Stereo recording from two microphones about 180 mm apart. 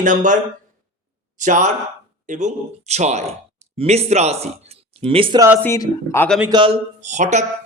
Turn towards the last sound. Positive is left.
turn(degrees=-40)  # may be behind; listen again after turning